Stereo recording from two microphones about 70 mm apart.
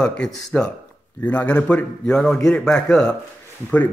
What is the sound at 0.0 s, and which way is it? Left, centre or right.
A man's voice, centre.